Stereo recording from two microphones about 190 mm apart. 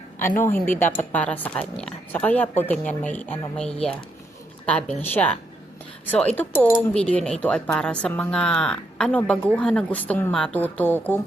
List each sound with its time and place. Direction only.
0.2 s a woman's voice: 10° left (ahead or behind)